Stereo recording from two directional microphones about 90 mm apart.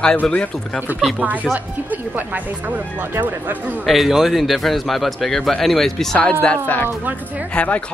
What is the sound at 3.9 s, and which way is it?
A man's voice, centre (ahead or behind).